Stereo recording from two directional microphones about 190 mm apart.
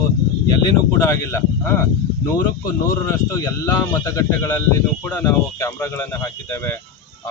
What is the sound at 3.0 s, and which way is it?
Speech, 15° left (ahead or behind).